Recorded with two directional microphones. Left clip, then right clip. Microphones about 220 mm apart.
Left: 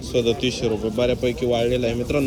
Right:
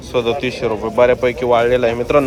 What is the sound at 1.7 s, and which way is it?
Speech, 5° left (ahead or behind).